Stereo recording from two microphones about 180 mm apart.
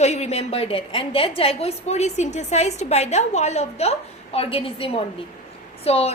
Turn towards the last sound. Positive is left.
turn(degrees=35)  # may be behind; listen again after turning